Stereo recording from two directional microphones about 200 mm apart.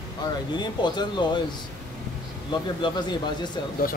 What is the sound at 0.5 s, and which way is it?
Speech, 20° left (ahead or behind).